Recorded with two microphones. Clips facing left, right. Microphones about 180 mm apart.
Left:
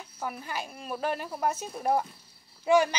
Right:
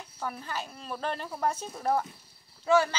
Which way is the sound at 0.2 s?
10° left (ahead or behind).